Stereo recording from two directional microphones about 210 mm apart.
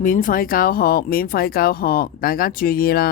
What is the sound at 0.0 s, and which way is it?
Speech, 40° left (ahead or behind).